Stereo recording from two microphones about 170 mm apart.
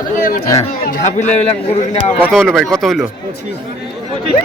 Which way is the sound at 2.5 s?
Centre (ahead or behind).